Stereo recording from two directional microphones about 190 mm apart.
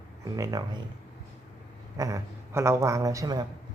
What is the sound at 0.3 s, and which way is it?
Speech, 15° right (ahead or behind).